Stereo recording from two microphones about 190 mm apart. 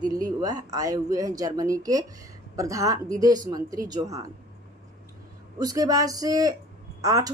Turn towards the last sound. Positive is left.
turn(degrees=-15)  # may be behind; listen again after turning